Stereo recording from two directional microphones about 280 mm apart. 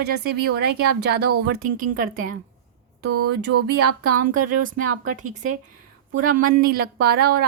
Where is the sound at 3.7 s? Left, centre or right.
Right.